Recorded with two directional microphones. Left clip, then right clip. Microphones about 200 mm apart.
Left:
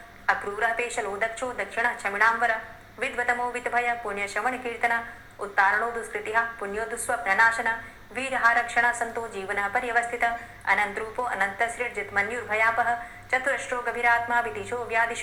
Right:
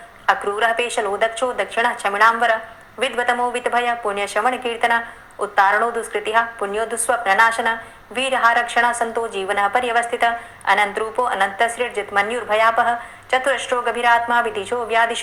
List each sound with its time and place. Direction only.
0.3 s a woman's voice: 40° right (ahead or behind)